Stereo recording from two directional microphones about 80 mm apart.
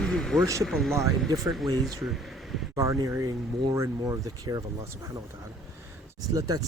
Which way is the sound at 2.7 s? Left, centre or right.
Right.